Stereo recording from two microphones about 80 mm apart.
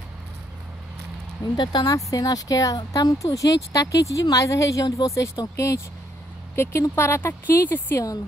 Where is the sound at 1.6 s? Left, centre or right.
Left.